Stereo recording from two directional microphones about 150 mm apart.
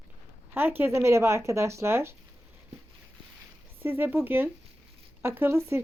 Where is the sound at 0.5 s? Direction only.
15° right (ahead or behind).